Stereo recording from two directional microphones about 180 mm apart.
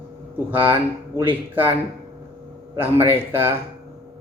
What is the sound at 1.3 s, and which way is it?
Speech, 10° right (ahead or behind).